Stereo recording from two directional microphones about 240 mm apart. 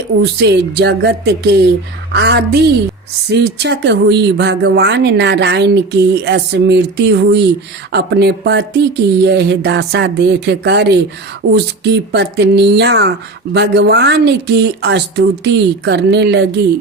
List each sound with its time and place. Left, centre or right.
0.2 s speech: right